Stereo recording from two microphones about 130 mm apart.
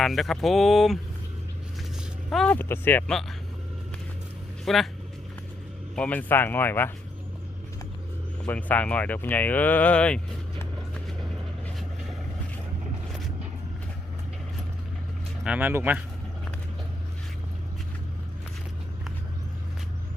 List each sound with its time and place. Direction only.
0.0 s a sound: centre (ahead or behind)
2.3 s a sound: 5° left (ahead or behind)
2.6 s speech: 15° left (ahead or behind)
4.6 s speech: centre (ahead or behind)
6.0 s speech: 10° left (ahead or behind)
8.4 s speech: 15° left (ahead or behind)
15.4 s speech: 15° right (ahead or behind)